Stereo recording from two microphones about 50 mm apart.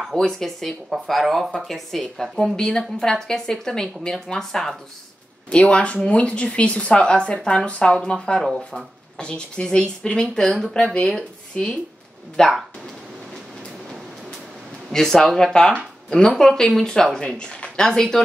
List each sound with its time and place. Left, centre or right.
0.1 s speech: centre
5.5 s a woman's voice: left
14.9 s speech: centre